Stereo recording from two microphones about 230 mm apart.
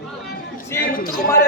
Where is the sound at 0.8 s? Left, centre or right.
Left.